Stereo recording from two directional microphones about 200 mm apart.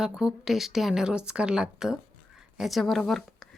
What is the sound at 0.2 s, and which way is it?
Speech, centre (ahead or behind).